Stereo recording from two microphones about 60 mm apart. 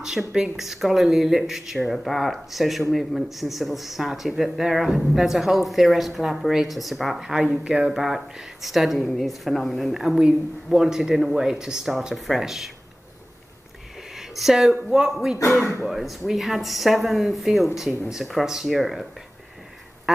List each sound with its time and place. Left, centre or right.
0.3 s speech: centre
9.0 s a woman's voice: centre
14.1 s speech: centre
15.4 s speech: left
15.8 s speech: centre